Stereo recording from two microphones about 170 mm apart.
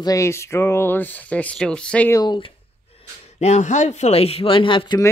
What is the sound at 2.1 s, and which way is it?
Speech, 25° left (ahead or behind).